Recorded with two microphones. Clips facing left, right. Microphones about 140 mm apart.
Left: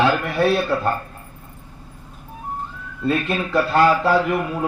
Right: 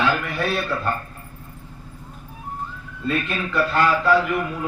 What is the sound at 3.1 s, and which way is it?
A man's voice, 35° left (ahead or behind).